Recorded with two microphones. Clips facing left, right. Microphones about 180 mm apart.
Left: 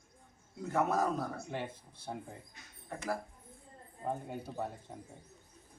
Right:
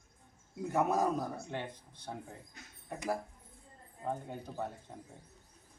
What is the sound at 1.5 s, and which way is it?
Speech, 10° left (ahead or behind).